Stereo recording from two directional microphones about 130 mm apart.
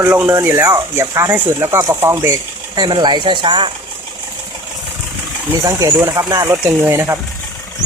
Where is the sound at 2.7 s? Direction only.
35° right (ahead or behind).